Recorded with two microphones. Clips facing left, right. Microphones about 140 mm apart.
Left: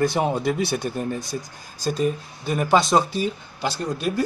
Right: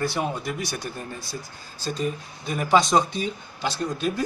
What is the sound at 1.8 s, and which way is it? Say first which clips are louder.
Speech: left 5 dB; 10° left (ahead or behind).